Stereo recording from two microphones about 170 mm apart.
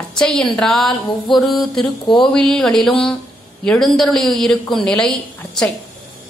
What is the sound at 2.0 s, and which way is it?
Speech, 30° left (ahead or behind).